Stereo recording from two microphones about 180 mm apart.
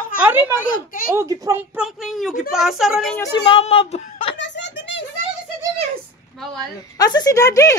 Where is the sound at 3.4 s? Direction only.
35° left (ahead or behind).